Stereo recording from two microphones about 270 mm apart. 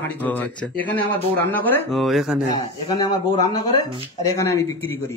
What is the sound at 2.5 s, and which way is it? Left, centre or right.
A man's voice, centre.